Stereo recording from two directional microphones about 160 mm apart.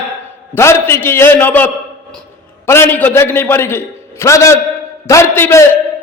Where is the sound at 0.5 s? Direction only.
15° left (ahead or behind).